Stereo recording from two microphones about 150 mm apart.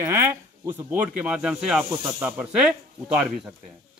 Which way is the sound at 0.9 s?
5° right (ahead or behind).